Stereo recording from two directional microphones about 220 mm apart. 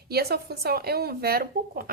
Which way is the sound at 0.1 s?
45° right (ahead or behind).